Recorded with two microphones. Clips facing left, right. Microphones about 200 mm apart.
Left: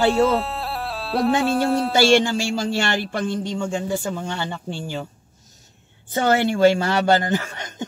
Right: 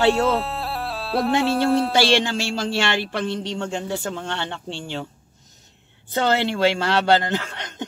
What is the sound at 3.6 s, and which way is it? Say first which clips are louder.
Speech: left 2 dB; 10° left (ahead or behind).